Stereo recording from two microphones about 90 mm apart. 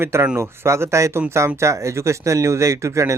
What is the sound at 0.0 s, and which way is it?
A man's voice, 30° right (ahead or behind).